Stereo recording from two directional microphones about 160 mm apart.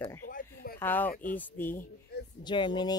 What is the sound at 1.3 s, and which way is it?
Speech, 10° left (ahead or behind).